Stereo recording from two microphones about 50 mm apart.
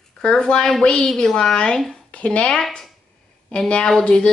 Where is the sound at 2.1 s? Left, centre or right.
Left.